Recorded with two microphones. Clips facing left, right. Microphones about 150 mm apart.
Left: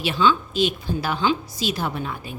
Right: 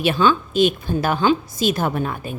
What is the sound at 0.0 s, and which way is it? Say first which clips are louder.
A woman's voice: right 3 dB; 50° right (ahead or behind).